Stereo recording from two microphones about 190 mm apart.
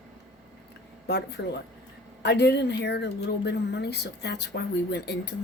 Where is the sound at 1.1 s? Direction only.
60° left (ahead or behind).